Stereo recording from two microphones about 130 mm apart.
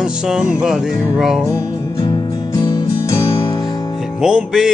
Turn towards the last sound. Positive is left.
turn(degrees=-5)  # may be behind; listen again after turning